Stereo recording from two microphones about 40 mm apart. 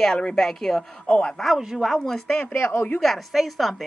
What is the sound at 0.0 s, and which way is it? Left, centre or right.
Speech, centre.